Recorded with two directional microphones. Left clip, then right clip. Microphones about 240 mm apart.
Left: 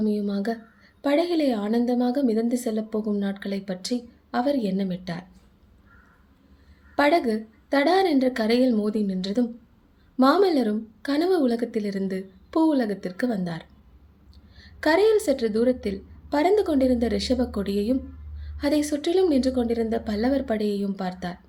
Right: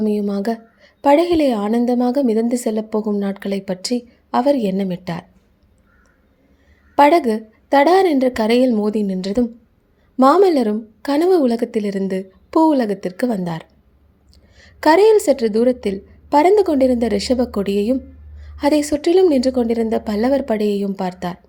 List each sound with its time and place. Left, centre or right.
0.0 s a woman's voice: right
6.9 s a woman's voice: right